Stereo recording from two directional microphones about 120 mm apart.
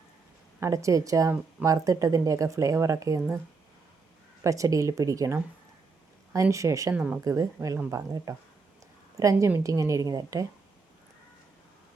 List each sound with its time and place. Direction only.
0.6 s speech: 25° right (ahead or behind)
4.4 s speech: 25° right (ahead or behind)
6.9 s speech: 10° right (ahead or behind)
7.3 s speech: 25° right (ahead or behind)